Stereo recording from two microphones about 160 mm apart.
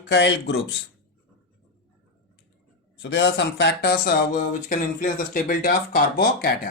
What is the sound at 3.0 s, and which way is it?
Speech, 90° left.